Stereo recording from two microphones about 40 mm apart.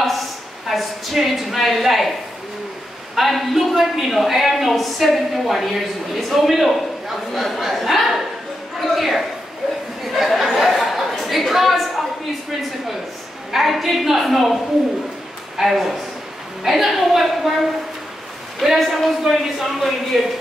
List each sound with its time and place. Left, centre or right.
0.7 s a woman's voice: centre
3.2 s a man's voice: centre
10.1 s a sound: centre
13.5 s a man's voice: centre
15.6 s a man's voice: centre
18.6 s a man's voice: centre